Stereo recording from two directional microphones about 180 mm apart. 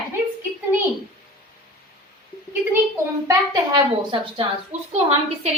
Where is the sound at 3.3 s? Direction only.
25° right (ahead or behind).